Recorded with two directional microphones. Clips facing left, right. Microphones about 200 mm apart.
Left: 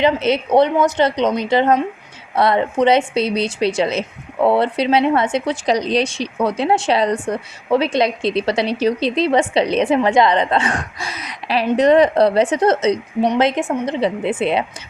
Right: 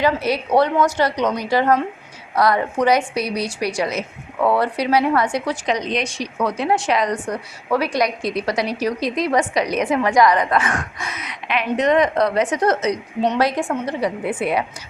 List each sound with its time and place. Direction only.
0.0 s a woman's voice: 25° left (ahead or behind)
5.6 s a woman's voice: 35° left (ahead or behind)